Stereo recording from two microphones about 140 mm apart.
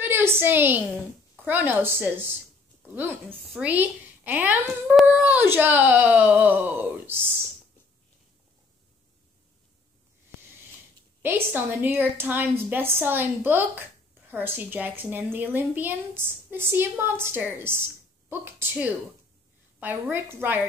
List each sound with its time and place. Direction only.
0.0 s a woman's voice: 15° right (ahead or behind)
11.2 s a woman's voice: 15° right (ahead or behind)